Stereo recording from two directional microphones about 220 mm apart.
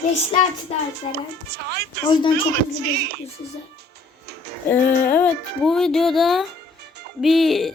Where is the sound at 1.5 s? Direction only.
45° right (ahead or behind).